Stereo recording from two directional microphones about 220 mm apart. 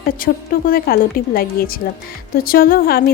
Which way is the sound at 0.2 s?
40° left (ahead or behind).